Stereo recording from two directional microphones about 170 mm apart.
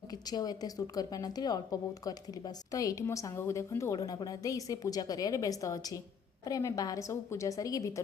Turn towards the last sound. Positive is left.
turn(degrees=20)  # may be behind; listen again after turning